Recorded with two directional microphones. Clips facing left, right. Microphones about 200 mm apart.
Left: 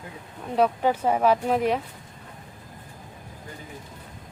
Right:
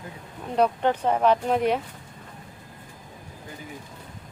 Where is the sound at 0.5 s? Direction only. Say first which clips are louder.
Even; 5° left (ahead or behind).